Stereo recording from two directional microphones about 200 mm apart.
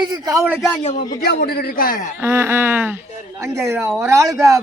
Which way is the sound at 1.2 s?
50° left (ahead or behind).